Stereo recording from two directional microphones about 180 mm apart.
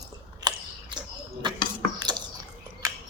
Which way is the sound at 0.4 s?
25° right (ahead or behind).